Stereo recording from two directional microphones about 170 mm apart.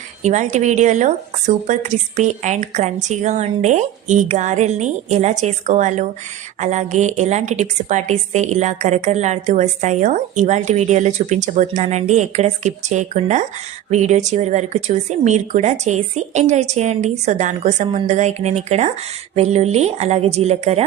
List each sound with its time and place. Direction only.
0.2 s a woman's voice: 45° right (ahead or behind)